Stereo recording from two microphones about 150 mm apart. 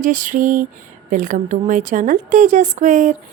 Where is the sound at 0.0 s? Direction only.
60° right (ahead or behind).